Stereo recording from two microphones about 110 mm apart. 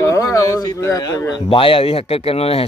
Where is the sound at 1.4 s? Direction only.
55° left (ahead or behind).